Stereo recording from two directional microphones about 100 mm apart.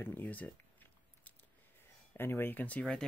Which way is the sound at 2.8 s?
5° left (ahead or behind).